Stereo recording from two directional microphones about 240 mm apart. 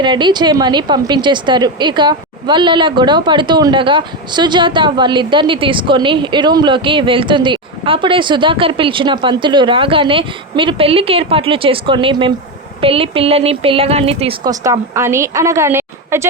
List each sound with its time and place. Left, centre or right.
0.0 s a woman's voice: centre